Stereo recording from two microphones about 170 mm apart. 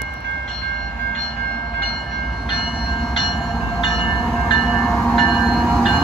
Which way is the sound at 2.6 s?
5° right (ahead or behind).